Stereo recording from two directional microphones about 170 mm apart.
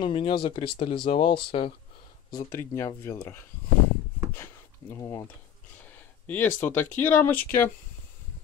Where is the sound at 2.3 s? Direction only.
15° left (ahead or behind).